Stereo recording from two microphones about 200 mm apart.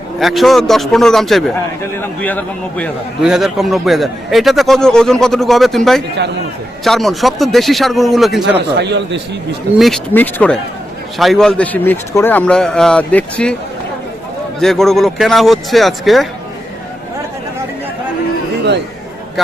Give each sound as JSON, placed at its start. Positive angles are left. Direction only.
{"t": 0.2, "sound": "a man's voice", "side_deg": 0}
{"t": 8.5, "sound": "speech", "side_deg": -60}
{"t": 9.7, "sound": "a man's voice", "side_deg": 0}
{"t": 14.6, "sound": "a man's voice", "side_deg": 0}